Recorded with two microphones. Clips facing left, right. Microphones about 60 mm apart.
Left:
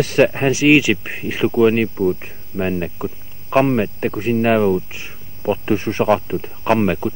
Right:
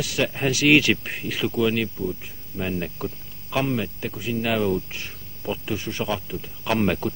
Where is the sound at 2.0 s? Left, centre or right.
Left.